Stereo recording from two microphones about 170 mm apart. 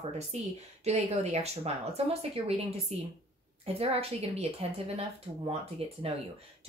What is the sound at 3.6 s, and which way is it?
A woman's voice, 35° right (ahead or behind).